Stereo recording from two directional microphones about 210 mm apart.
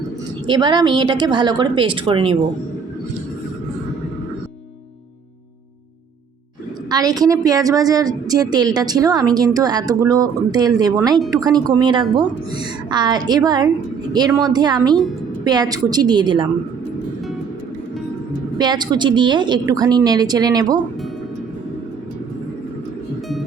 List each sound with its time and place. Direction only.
0.4 s speech: 20° right (ahead or behind)
6.9 s a woman's voice: 20° right (ahead or behind)
18.5 s speech: 20° right (ahead or behind)